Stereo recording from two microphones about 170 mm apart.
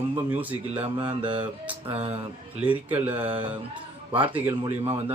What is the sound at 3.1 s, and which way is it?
Speech, 10° right (ahead or behind).